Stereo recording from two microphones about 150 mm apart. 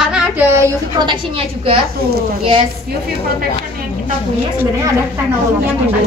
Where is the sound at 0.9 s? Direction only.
30° right (ahead or behind).